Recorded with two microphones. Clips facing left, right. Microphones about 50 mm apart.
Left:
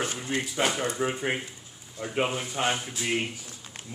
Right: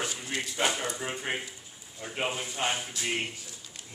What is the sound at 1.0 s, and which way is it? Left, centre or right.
Speech, centre.